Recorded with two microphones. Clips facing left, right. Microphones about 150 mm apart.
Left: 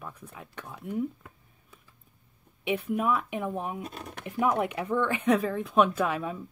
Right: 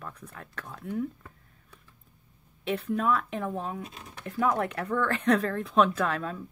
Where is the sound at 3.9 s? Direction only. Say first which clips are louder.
Left 6 dB; 60° left (ahead or behind).